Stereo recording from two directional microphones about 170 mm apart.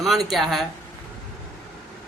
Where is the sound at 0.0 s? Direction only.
Centre (ahead or behind).